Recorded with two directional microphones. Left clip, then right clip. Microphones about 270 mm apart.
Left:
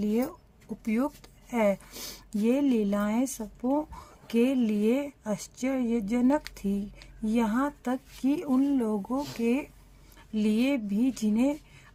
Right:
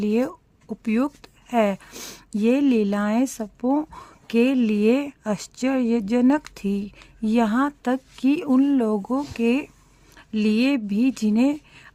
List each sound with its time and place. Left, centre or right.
0.0 s speech: right